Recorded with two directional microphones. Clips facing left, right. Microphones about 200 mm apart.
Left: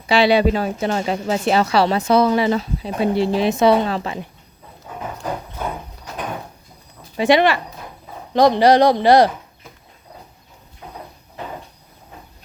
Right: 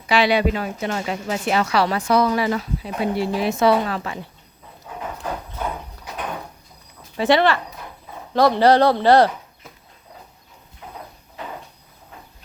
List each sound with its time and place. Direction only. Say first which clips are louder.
0.1 s a woman's voice: left 3 dB; 30° left (ahead or behind)
7.2 s speech: left 2 dB; 15° left (ahead or behind)